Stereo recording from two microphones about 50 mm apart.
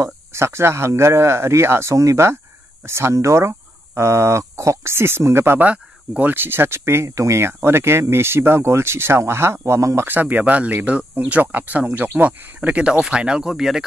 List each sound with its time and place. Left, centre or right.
0.0 s speech: right
2.8 s speech: right
5.6 s speech: right
6.3 s speech: right
10.0 s speech: right
12.1 s speech: right; by 13.8 s centre